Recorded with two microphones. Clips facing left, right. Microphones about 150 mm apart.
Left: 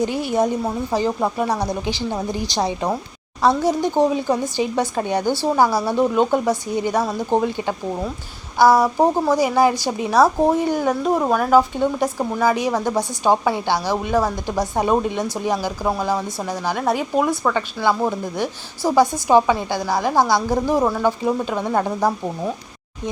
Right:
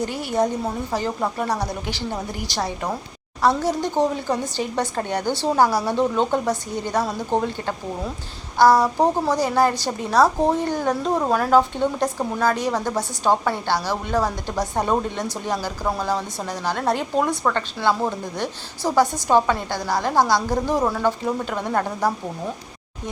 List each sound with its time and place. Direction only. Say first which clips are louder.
0.0 s speech: left 3 dB; 15° left (ahead or behind)